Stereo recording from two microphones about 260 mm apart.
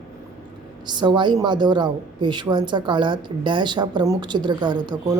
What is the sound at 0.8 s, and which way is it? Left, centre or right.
Speech, centre.